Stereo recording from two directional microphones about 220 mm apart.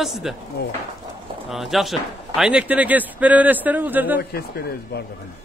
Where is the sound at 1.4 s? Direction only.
Centre (ahead or behind).